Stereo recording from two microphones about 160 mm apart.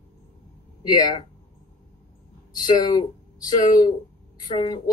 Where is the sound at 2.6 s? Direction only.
25° left (ahead or behind).